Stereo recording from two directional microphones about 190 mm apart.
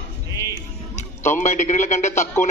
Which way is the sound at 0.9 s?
40° left (ahead or behind).